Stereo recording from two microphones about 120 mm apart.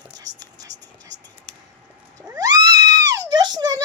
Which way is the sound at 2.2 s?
25° right (ahead or behind).